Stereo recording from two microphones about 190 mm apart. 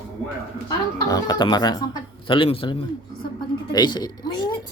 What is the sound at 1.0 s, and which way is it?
Speech, 20° left (ahead or behind).